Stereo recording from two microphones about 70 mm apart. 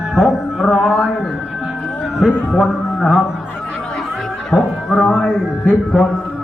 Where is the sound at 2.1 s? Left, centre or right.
Centre.